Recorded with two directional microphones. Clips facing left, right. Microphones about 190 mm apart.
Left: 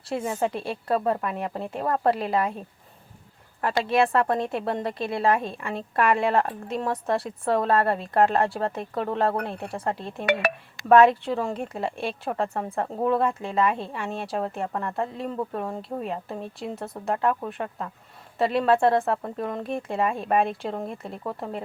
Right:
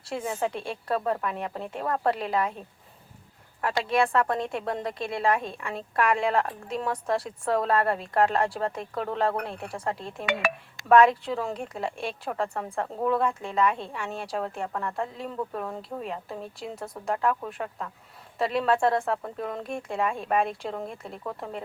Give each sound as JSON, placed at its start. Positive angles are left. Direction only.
{"t": 0.1, "sound": "speech", "side_deg": 5}
{"t": 3.6, "sound": "speech", "side_deg": 0}
{"t": 10.2, "sound": "speech", "side_deg": 65}
{"t": 10.8, "sound": "speech", "side_deg": 0}